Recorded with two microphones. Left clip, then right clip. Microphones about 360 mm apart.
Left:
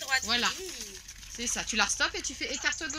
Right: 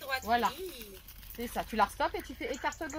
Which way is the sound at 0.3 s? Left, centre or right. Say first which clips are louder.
Left 1 dB; centre.